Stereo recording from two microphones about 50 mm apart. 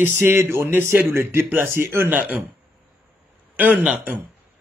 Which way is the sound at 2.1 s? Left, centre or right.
Right.